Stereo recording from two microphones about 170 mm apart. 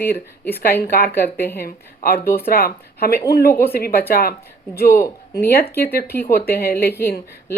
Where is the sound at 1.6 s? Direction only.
60° left (ahead or behind).